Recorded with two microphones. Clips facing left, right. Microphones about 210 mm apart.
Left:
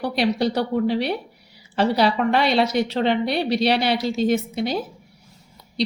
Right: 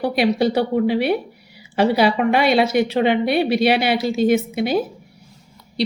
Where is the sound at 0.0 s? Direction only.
5° right (ahead or behind).